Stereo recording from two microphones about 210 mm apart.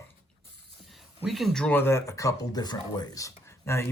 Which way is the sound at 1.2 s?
Centre (ahead or behind).